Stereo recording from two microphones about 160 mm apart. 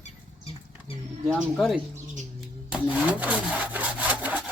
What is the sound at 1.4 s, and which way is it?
Speech, 5° right (ahead or behind).